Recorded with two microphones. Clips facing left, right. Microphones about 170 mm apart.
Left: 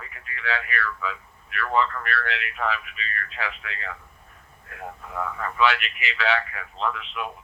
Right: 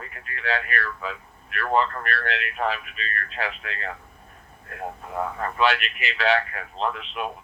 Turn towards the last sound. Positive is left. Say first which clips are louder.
# right 1 dB
turn(degrees=-40)  # may be behind; listen again after turning